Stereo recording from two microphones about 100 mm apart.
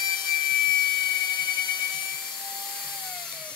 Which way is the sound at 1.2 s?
45° left (ahead or behind).